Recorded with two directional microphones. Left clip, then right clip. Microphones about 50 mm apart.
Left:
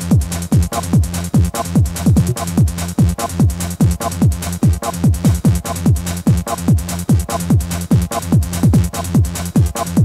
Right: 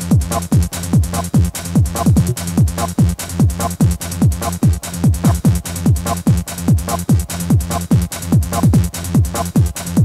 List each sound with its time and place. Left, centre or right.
0.1 s music: right